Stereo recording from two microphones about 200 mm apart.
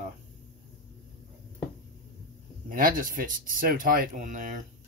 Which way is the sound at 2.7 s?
45° right (ahead or behind).